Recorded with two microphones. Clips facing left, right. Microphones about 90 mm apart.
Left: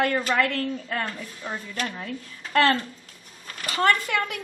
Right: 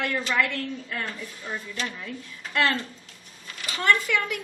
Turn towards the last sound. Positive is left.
turn(degrees=45)  # may be behind; listen again after turning